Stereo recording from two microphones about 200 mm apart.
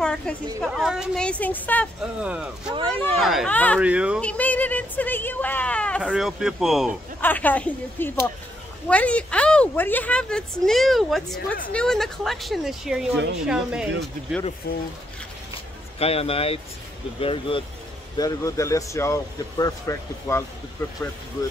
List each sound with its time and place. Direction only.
0.0 s a woman's voice: 5° left (ahead or behind)
2.2 s speech: 5° right (ahead or behind)
2.7 s speech: 25° right (ahead or behind)
3.2 s speech: centre (ahead or behind)
3.8 s speech: 5° right (ahead or behind)
4.2 s speech: 5° left (ahead or behind)
7.2 s speech: 10° left (ahead or behind)
11.3 s a woman's voice: 45° left (ahead or behind)
11.7 s speech: 5° left (ahead or behind)
14.7 s a woman's voice: 50° left (ahead or behind)
16.0 s speech: 30° left (ahead or behind); by 20.4 s 15° left (ahead or behind)